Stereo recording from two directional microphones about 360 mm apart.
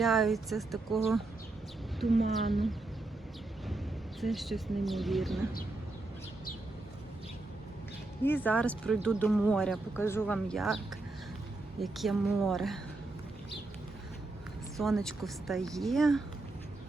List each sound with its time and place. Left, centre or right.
0.0 s speech: centre
2.3 s speech: centre
4.2 s speech: centre
8.2 s speech: centre
11.8 s speech: centre
14.8 s speech: centre